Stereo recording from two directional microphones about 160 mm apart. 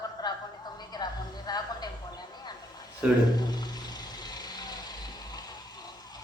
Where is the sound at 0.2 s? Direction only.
25° left (ahead or behind).